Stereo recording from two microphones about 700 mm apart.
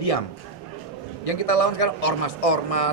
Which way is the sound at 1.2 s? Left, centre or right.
Left.